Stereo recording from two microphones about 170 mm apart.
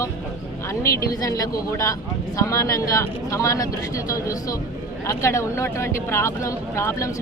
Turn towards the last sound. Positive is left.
turn(degrees=15)  # may be behind; listen again after turning